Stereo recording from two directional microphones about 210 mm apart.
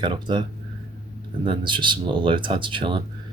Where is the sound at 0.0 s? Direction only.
20° right (ahead or behind).